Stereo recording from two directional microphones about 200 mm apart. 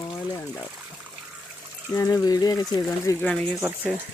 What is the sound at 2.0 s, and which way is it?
Speech, 20° left (ahead or behind).